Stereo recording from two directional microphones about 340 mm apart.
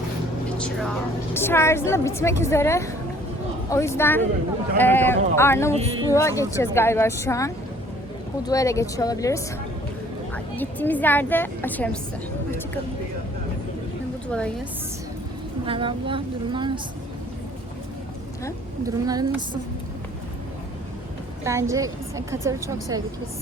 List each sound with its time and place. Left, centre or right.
0.6 s a woman's voice: centre
5.7 s a woman's voice: centre
6.1 s a woman's voice: centre
10.5 s a woman's voice: centre
14.3 s a woman's voice: centre
15.6 s a woman's voice: centre
19.0 s a woman's voice: centre
21.4 s a woman's voice: centre